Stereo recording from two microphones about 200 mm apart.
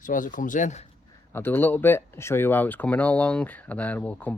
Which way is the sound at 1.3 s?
10° left (ahead or behind).